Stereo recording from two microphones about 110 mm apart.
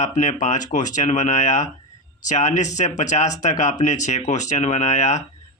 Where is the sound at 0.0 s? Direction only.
90° left.